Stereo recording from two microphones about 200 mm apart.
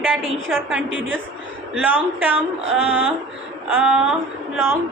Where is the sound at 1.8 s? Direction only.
10° right (ahead or behind).